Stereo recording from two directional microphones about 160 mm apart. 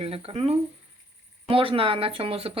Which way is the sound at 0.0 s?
35° right (ahead or behind).